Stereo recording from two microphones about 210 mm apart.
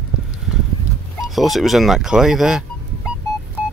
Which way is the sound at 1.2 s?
Centre (ahead or behind).